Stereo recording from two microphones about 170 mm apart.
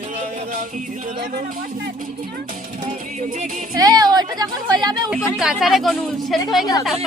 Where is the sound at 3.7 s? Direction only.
20° right (ahead or behind).